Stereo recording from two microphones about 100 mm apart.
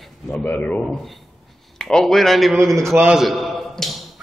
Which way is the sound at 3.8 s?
Centre (ahead or behind).